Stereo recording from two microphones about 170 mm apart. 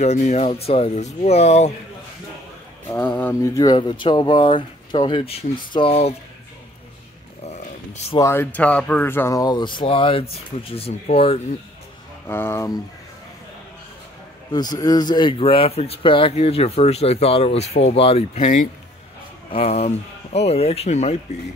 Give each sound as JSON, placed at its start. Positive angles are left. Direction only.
{"t": 0.0, "sound": "speech", "side_deg": 40}
{"t": 2.9, "sound": "speech", "side_deg": 10}
{"t": 7.4, "sound": "a sound", "side_deg": 40}
{"t": 8.2, "sound": "speech", "side_deg": 15}
{"t": 12.3, "sound": "speech", "side_deg": 15}
{"t": 14.5, "sound": "speech", "side_deg": 25}